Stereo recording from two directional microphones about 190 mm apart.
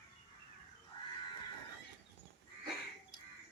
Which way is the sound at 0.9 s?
25° left (ahead or behind).